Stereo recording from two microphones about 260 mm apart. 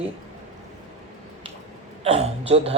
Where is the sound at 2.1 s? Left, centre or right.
Right.